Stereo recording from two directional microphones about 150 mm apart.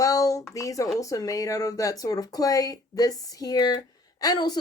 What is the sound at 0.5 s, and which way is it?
A woman's voice, 20° left (ahead or behind).